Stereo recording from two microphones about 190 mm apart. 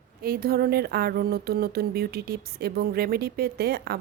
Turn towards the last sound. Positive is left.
turn(degrees=-55)  # may be behind; listen again after turning